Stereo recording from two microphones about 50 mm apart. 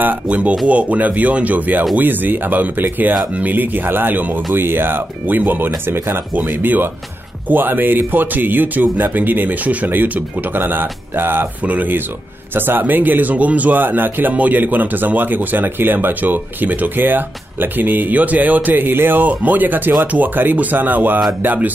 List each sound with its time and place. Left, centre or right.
0.3 s speech: right
6.3 s speech: right
11.6 s speech: right